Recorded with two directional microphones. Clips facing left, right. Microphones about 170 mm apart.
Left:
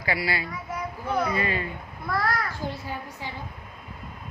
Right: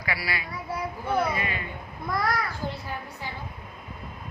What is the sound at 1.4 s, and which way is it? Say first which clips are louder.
Speech: left 4 dB; 30° left (ahead or behind).